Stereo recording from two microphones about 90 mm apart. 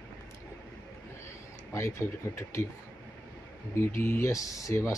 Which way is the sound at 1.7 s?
30° left (ahead or behind).